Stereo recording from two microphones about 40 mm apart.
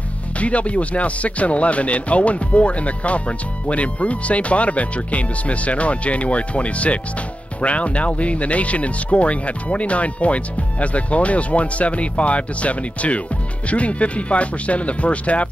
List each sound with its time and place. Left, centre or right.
0.4 s speech: left